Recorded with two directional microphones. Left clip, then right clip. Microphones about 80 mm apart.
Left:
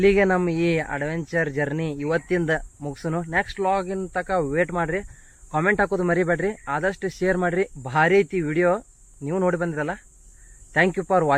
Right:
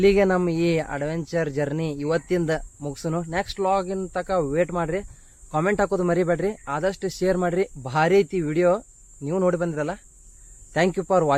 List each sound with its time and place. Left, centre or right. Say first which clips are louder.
0.0 s speech: even; right